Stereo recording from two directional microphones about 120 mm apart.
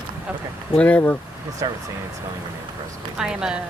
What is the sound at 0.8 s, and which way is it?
Speech, 10° left (ahead or behind).